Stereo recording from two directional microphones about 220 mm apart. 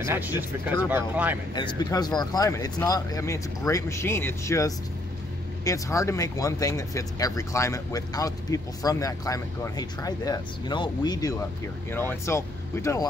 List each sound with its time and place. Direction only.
0.0 s speech: 10° right (ahead or behind)
1.5 s speech: 20° left (ahead or behind)